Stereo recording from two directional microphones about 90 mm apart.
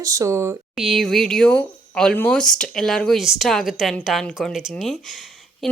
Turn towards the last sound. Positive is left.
turn(degrees=-5)  # may be behind; listen again after turning